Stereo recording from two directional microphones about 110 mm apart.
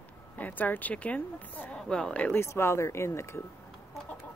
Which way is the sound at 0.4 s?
15° left (ahead or behind).